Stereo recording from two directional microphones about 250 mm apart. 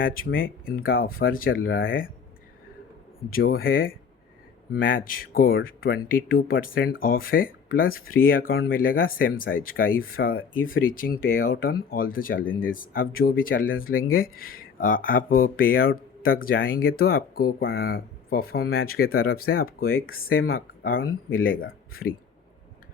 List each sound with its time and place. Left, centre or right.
0.3 s speech: left
3.3 s speech: left
21.0 s speech: left
21.6 s speech: left